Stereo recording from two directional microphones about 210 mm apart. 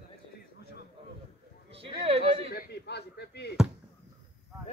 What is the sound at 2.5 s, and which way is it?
Speech, 50° left (ahead or behind).